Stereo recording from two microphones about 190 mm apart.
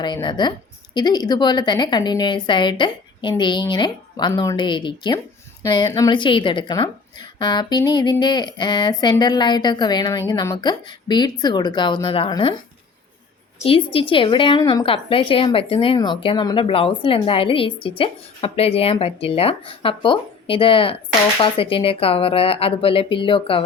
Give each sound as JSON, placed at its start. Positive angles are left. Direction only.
{"t": 0.0, "sound": "a woman's voice", "side_deg": 25}
{"t": 13.7, "sound": "a woman's voice", "side_deg": 30}